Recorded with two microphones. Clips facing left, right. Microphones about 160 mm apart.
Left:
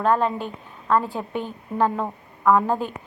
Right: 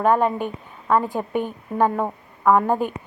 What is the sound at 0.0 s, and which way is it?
A woman's voice, 10° right (ahead or behind).